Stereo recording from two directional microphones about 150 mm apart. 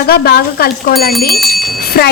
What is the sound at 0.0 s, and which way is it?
A woman's voice, 90° left.